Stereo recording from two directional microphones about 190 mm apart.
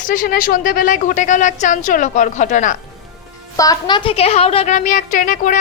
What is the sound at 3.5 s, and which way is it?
A woman's voice, 20° left (ahead or behind).